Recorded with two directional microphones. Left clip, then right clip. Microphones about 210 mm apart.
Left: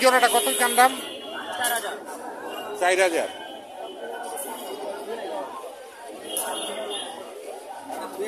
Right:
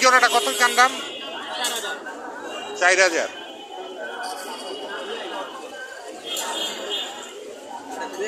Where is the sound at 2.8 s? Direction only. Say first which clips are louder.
Right 3 dB; 20° left (ahead or behind).